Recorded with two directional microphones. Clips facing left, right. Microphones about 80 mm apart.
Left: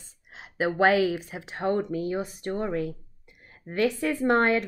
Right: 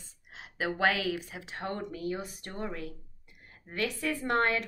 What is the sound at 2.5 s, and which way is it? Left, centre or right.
Speech, left.